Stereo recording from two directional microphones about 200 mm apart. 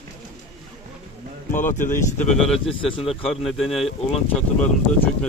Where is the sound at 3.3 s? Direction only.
Centre (ahead or behind).